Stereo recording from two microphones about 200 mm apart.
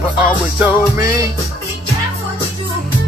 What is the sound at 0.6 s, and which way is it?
Speech, 15° right (ahead or behind).